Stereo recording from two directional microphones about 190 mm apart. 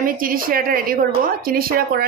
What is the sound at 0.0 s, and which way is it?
A woman's voice, 50° right (ahead or behind).